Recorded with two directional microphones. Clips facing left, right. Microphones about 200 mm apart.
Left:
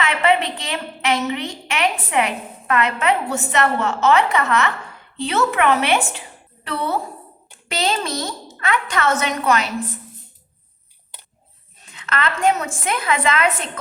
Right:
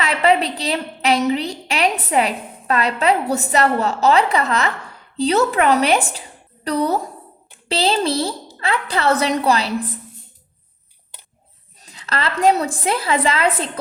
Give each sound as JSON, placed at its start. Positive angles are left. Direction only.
{"t": 0.0, "sound": "a woman's voice", "side_deg": -35}
{"t": 11.8, "sound": "a woman's voice", "side_deg": -35}